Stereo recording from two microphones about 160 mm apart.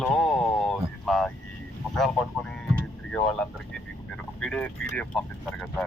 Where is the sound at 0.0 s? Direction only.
5° left (ahead or behind).